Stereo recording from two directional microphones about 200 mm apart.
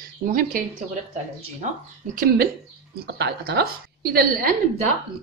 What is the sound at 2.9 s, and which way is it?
Speech, 55° right (ahead or behind).